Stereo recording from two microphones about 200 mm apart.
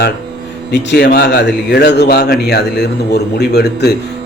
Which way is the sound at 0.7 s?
60° left (ahead or behind).